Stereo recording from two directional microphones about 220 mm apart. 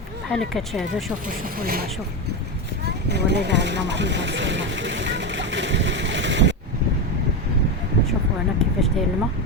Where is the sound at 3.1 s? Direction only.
50° right (ahead or behind).